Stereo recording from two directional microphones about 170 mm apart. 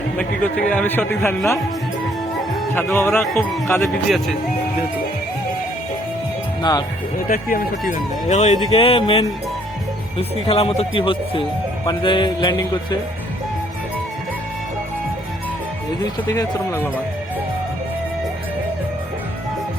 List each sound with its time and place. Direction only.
0.2 s a man's voice: 5° left (ahead or behind)
2.7 s a man's voice: 10° left (ahead or behind)
6.6 s speech: 25° left (ahead or behind)
7.3 s speech: 55° left (ahead or behind)
8.7 s speech: 30° left (ahead or behind)
11.9 s music: 25° left (ahead or behind)
16.3 s a man's voice: 15° left (ahead or behind)